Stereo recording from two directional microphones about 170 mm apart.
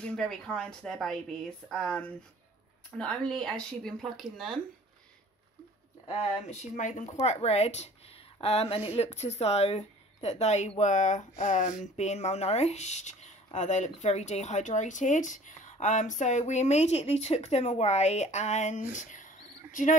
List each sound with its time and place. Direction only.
0.0 s speech: 5° left (ahead or behind)
6.0 s speech: 35° left (ahead or behind)